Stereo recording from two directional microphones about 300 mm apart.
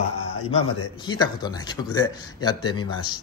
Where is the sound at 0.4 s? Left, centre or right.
Left.